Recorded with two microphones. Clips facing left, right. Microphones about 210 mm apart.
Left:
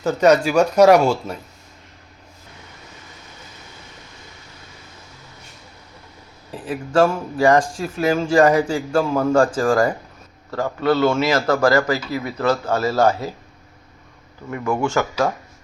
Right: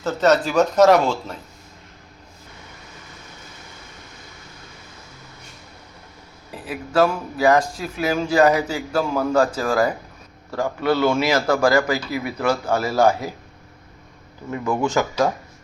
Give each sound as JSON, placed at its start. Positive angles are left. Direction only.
{"t": 0.0, "sound": "a man's voice", "side_deg": 10}
{"t": 7.1, "sound": "a man's voice", "side_deg": -5}
{"t": 14.5, "sound": "a man's voice", "side_deg": -20}